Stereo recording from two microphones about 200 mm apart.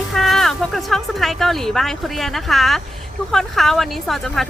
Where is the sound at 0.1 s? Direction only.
Centre (ahead or behind).